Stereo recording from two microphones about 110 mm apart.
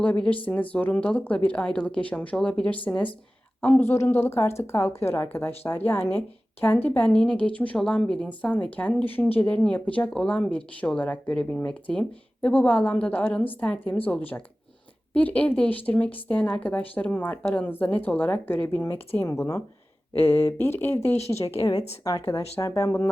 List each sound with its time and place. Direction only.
0.0 s a woman's voice: 10° left (ahead or behind)
21.6 s a woman's voice: 35° left (ahead or behind)